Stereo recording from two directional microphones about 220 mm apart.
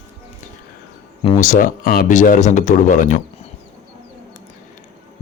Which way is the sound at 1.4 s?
35° left (ahead or behind).